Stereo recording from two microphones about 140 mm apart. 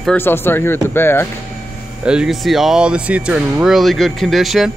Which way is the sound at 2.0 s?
5° right (ahead or behind).